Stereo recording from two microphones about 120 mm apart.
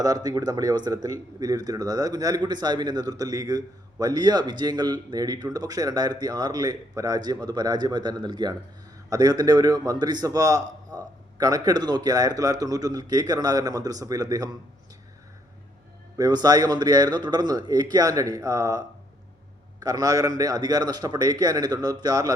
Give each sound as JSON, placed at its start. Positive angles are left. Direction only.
{"t": 0.0, "sound": "speech", "side_deg": -30}
{"t": 16.1, "sound": "speech", "side_deg": -35}